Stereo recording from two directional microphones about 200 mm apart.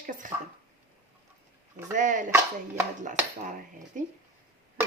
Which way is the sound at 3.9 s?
40° right (ahead or behind).